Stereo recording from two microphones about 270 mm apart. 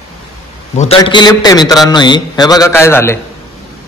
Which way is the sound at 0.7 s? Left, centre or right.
Left.